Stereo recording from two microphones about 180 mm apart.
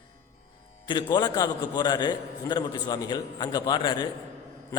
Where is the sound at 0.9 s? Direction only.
25° left (ahead or behind).